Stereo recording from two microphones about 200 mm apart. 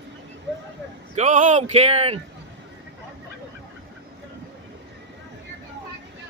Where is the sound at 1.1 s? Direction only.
35° right (ahead or behind).